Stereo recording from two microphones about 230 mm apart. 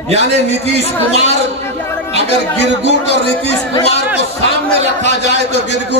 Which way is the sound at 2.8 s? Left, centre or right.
Left.